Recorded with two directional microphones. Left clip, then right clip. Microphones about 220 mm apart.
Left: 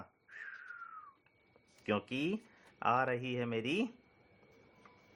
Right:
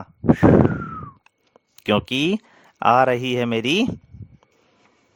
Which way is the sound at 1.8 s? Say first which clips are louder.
Right 16 dB; 50° right (ahead or behind).